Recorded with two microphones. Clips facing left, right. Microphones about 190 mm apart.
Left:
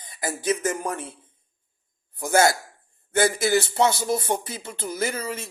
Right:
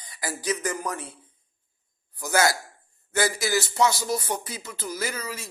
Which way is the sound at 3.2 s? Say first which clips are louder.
Left 4 dB; 25° left (ahead or behind).